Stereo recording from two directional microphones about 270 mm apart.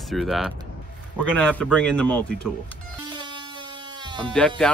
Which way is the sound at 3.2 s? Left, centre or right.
Centre.